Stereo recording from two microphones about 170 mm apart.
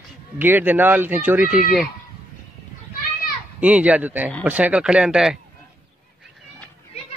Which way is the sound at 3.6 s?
10° right (ahead or behind).